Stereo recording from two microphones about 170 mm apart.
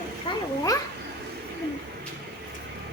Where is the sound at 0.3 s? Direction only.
30° left (ahead or behind).